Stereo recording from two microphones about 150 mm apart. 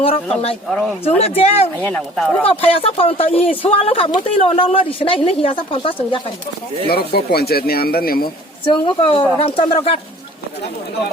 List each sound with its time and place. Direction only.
0.7 s speech: centre (ahead or behind)
1.2 s speech: 45° left (ahead or behind)
1.8 s speech: 5° left (ahead or behind)
2.5 s speech: 40° left (ahead or behind)
6.9 s speech: 90° left
8.6 s speech: 35° left (ahead or behind)